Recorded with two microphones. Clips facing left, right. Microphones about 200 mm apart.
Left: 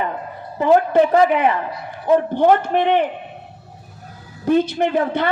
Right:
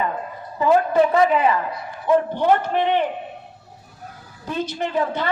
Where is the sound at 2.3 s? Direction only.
50° left (ahead or behind).